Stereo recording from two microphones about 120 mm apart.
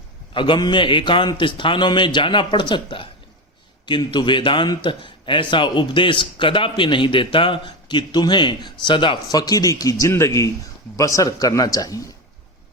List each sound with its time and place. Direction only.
0.3 s a man's voice: 40° left (ahead or behind)